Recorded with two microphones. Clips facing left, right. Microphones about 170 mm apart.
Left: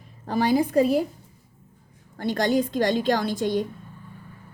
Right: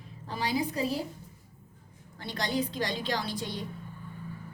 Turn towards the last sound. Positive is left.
turn(degrees=50)  # may be behind; listen again after turning